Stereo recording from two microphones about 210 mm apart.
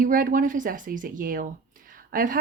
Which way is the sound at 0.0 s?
40° right (ahead or behind).